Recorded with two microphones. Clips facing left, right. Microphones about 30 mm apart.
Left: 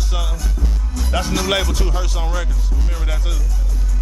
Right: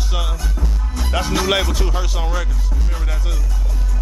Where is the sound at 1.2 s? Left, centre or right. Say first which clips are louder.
Right 1 dB; centre.